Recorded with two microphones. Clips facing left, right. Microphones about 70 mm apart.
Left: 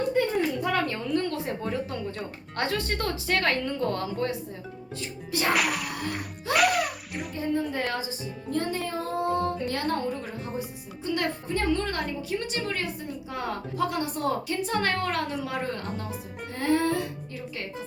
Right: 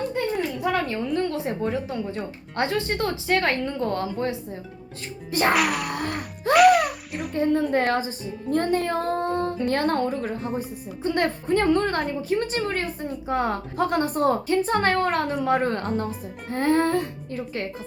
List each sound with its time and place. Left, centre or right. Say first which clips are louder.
0.6 s a woman's voice: right 3 dB; centre
5.3 s a woman's voice: right 5 dB; right
5.5 s music: right 4 dB; centre
5.9 s music: right 4 dB; right
6.5 s music: right 8 dB; centre
7.3 s a woman's voice: right 7 dB; right